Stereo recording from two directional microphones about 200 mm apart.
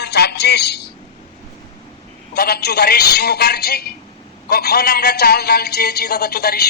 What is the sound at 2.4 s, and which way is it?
A man's voice, 50° left (ahead or behind).